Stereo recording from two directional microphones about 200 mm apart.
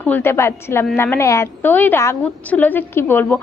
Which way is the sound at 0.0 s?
10° left (ahead or behind).